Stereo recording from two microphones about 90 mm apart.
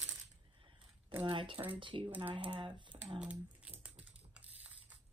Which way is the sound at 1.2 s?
65° right (ahead or behind).